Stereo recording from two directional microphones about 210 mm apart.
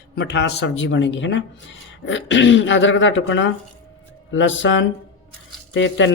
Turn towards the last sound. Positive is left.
turn(degrees=60)  # may be behind; listen again after turning